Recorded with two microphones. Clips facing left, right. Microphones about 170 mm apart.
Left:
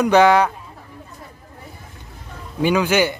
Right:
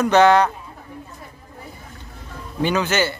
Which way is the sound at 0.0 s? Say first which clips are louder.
Left 1 dB; 10° left (ahead or behind).